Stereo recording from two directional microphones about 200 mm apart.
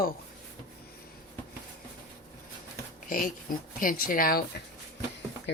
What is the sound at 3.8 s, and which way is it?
Speech, 45° left (ahead or behind).